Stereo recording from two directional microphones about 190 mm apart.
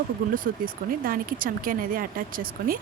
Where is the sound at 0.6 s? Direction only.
50° right (ahead or behind).